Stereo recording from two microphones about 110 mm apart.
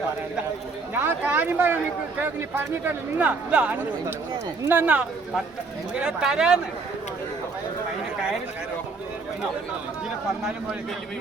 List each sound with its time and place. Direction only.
0.9 s speech: 15° right (ahead or behind)